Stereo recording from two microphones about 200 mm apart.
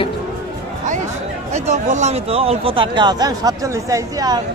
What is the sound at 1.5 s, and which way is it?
Speech, 35° right (ahead or behind).